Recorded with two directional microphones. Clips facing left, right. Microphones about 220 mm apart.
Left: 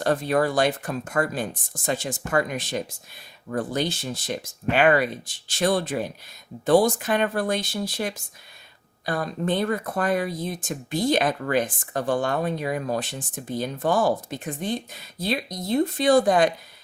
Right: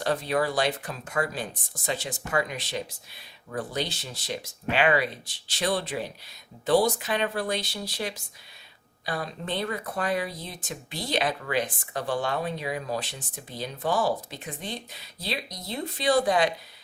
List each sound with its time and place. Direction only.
0.0 s speech: 50° left (ahead or behind)